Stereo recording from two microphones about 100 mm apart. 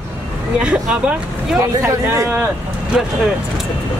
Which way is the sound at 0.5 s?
10° right (ahead or behind).